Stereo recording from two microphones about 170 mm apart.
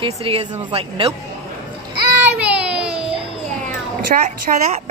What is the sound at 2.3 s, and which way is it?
Baby cry, 10° right (ahead or behind).